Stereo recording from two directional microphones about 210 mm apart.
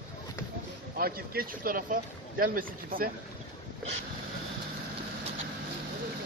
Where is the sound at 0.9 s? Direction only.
45° right (ahead or behind).